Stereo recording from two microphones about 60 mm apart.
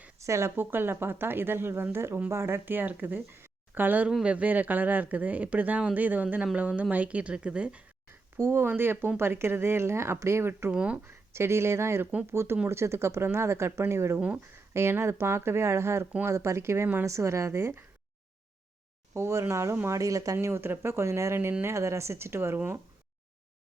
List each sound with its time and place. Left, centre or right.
0.2 s speech: right
0.5 s speech: right; by 7.9 s centre
8.4 s speech: right
10.7 s speech: right
11.0 s speech: right
14.2 s speech: right
14.7 s speech: right
19.1 s speech: right
19.9 s speech: right